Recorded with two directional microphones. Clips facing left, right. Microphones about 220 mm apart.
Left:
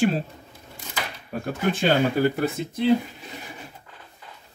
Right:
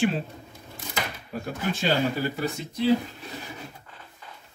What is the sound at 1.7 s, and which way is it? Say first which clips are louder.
Speech: left 4 dB; 55° left (ahead or behind).